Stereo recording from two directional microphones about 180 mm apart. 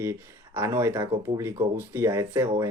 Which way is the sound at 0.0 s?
15° right (ahead or behind).